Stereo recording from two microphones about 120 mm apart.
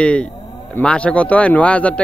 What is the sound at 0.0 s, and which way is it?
Speech, 10° left (ahead or behind).